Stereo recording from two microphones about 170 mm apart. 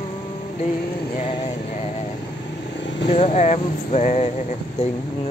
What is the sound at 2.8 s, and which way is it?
Vehicle, 90° left.